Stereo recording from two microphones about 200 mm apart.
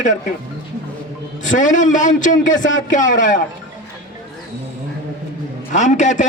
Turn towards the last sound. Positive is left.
turn(degrees=40)  # may be behind; listen again after turning